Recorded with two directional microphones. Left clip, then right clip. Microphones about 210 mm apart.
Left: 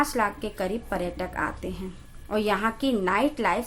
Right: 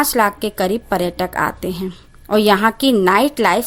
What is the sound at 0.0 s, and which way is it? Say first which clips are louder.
A woman's voice: right 9 dB; 45° right (ahead or behind).